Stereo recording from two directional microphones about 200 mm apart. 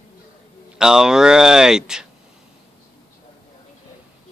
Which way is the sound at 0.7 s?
5° right (ahead or behind).